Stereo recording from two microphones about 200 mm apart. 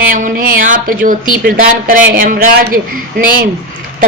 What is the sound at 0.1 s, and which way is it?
Speech, 45° right (ahead or behind).